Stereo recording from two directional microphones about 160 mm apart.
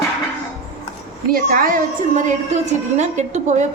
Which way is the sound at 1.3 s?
60° right (ahead or behind).